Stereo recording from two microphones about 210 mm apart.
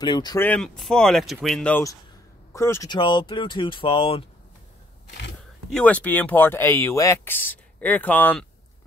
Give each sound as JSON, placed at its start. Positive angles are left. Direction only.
{"t": 0.0, "sound": "speech", "side_deg": 20}
{"t": 0.5, "sound": "speech", "side_deg": 5}
{"t": 5.7, "sound": "speech", "side_deg": 5}